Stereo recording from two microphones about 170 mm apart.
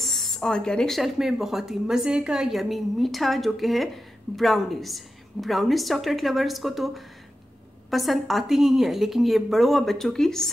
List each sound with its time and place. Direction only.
0.0 s speech: centre (ahead or behind)